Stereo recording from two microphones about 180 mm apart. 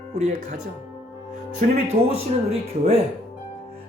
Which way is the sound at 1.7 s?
35° right (ahead or behind).